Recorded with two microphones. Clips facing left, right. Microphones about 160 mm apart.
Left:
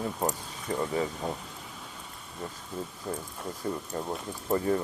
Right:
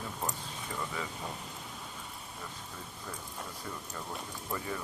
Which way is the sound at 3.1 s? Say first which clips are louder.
Left 5 dB; 45° left (ahead or behind).